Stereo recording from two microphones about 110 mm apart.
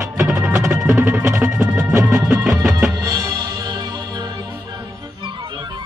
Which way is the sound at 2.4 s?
5° right (ahead or behind).